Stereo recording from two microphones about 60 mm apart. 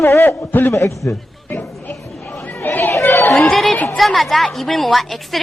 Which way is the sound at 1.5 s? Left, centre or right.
Left.